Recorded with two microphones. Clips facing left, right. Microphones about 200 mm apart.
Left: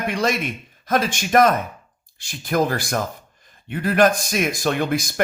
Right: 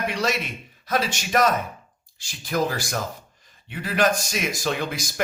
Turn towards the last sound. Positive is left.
turn(degrees=55)  # may be behind; listen again after turning